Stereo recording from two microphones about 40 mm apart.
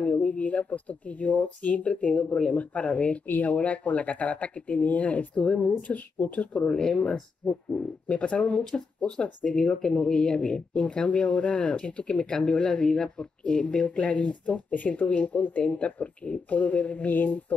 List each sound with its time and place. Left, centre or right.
0.0 s a sound: left
0.5 s speech: left
6.7 s speech: centre
7.0 s speech: left
15.7 s speech: left